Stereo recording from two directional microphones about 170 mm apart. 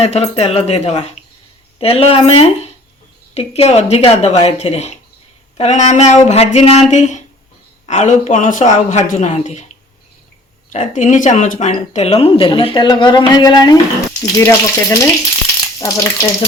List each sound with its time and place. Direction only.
0.0 s speech: 40° left (ahead or behind)
10.7 s speech: 45° left (ahead or behind)
11.7 s speech: 35° left (ahead or behind); by 16.5 s 20° left (ahead or behind)